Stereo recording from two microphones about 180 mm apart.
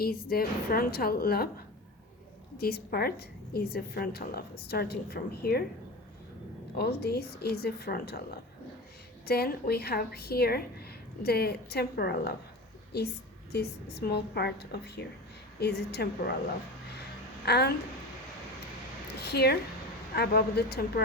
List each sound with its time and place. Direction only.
0.0 s a woman's voice: 55° left (ahead or behind)
2.6 s a woman's voice: 60° left (ahead or behind)
6.7 s a woman's voice: 60° left (ahead or behind)
9.2 s a woman's voice: 60° left (ahead or behind)
17.4 s speech: 60° left (ahead or behind)
19.2 s a woman's voice: 65° left (ahead or behind)